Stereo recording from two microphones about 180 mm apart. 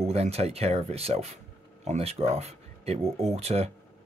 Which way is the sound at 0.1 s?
35° right (ahead or behind).